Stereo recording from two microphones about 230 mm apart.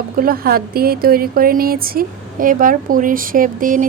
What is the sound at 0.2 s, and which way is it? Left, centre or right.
Speech, right.